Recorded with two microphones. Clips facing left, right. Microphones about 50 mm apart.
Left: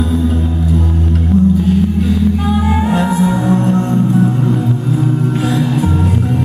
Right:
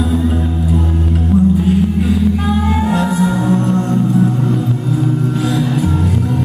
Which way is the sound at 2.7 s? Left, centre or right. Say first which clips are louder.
Left 1 dB; centre.